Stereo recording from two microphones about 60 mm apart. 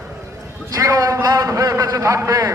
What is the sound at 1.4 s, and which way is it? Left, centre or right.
Speech, right.